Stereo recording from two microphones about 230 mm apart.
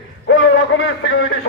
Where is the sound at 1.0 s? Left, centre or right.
Left.